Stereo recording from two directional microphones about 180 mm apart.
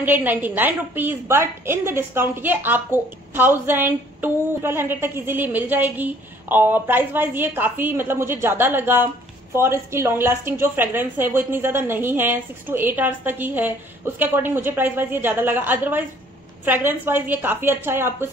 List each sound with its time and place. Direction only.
0.0 s a woman's voice: 10° right (ahead or behind)